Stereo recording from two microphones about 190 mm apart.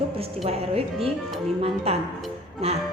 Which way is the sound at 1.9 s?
30° right (ahead or behind).